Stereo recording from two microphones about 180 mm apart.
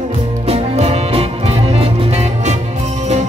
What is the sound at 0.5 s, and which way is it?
Music, 35° right (ahead or behind).